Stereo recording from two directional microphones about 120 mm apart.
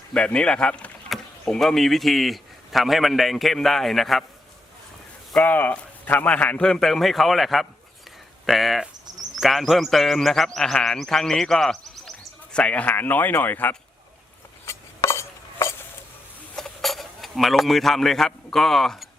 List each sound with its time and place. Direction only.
0.1 s speech: 10° left (ahead or behind)
5.3 s a man's voice: 10° left (ahead or behind)
14.6 s a sound: 25° left (ahead or behind)
16.6 s speech: centre (ahead or behind)